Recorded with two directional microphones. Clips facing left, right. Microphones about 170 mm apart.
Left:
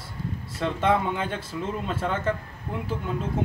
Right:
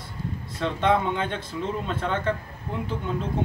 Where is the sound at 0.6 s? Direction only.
5° left (ahead or behind).